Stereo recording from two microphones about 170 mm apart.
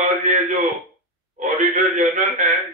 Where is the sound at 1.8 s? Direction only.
45° right (ahead or behind).